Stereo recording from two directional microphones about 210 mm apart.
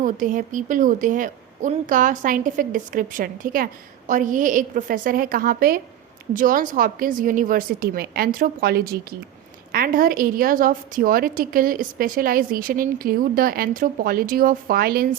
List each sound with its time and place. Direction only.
0.0 s a woman's voice: 40° right (ahead or behind)